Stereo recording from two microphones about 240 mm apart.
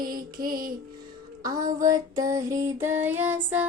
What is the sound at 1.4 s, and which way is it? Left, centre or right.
Music, centre.